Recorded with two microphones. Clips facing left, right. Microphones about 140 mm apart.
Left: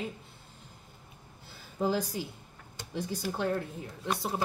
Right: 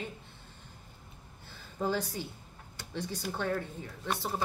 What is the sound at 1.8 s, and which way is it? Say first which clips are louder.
Speech: left 3 dB; 10° left (ahead or behind).